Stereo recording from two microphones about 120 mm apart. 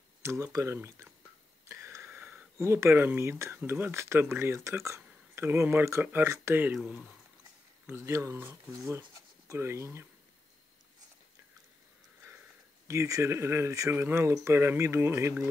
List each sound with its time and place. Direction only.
0.2 s speech: 25° right (ahead or behind)
6.7 s speech: 5° right (ahead or behind)
7.8 s speech: 20° right (ahead or behind)
12.8 s speech: 25° right (ahead or behind)